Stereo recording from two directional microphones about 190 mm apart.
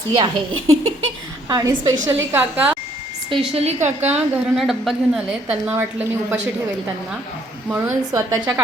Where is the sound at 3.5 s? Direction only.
35° right (ahead or behind).